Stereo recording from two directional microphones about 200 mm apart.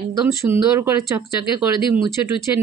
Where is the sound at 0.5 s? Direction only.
15° right (ahead or behind).